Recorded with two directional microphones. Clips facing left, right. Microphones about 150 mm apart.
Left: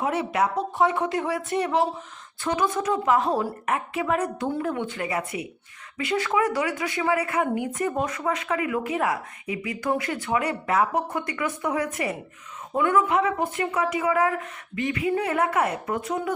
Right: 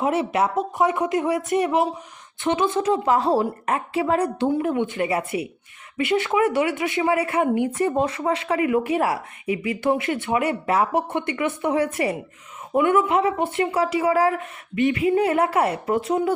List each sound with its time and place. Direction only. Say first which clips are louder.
0.0 s a woman's voice: right 3 dB; 25° right (ahead or behind)
4.5 s speech: right 5 dB; 15° right (ahead or behind)